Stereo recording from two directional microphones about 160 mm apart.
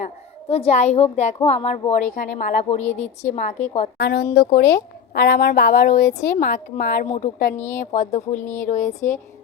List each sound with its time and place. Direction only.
0.0 s a child's voice: 40° left (ahead or behind); by 2.6 s 55° left (ahead or behind)
2.6 s speech: 45° left (ahead or behind)
3.9 s speech: 90° left
4.5 s a woman's voice: 80° left; by 9.1 s 50° left (ahead or behind)